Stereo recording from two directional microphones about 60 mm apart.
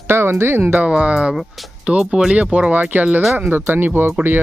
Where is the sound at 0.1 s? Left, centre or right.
Right.